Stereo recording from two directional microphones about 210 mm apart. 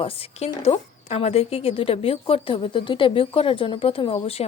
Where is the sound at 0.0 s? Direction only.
25° left (ahead or behind).